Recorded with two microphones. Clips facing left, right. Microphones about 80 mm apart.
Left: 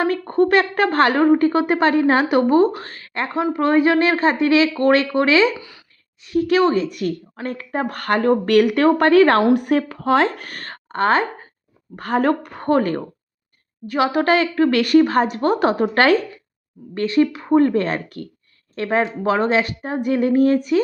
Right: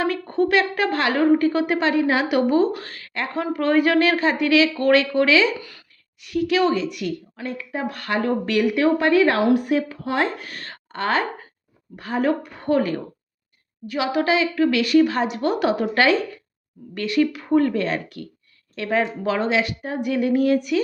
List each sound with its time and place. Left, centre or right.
0.0 s speech: left
5.5 s speech: centre
6.2 s a woman's voice: left
11.9 s a woman's voice: left
16.9 s speech: left